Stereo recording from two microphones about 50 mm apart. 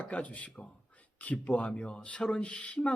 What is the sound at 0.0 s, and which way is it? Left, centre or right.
Speech, left.